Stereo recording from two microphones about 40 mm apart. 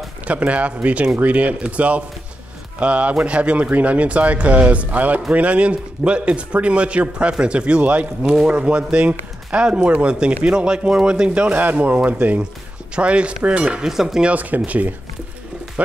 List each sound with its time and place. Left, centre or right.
0.3 s a man's voice: right
7.8 s a man's voice: right
10.4 s a man's voice: right
11.8 s speech: right
12.9 s a man's voice: right
13.8 s speech: centre
14.3 s speech: right